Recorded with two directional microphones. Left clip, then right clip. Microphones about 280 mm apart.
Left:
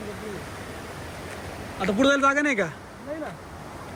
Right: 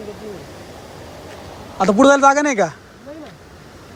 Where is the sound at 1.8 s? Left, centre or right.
Right.